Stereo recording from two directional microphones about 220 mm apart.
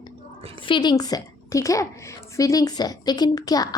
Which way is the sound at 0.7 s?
20° left (ahead or behind).